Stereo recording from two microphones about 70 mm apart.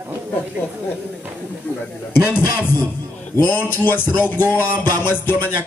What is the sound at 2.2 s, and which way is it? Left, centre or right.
Music, centre.